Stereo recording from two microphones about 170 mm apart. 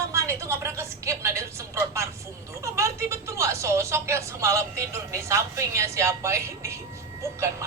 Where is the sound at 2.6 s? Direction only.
15° right (ahead or behind).